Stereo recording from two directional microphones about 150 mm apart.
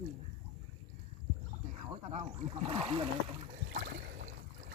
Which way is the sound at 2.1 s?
40° right (ahead or behind).